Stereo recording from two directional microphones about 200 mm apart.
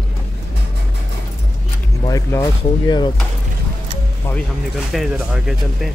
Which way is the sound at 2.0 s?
15° left (ahead or behind).